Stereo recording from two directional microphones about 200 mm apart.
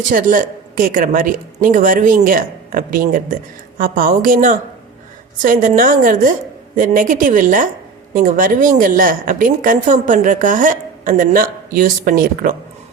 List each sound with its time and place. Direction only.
0.1 s a woman's voice: 40° right (ahead or behind)